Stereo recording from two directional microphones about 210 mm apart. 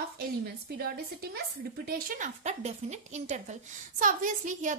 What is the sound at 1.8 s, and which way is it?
A woman's voice, 40° right (ahead or behind).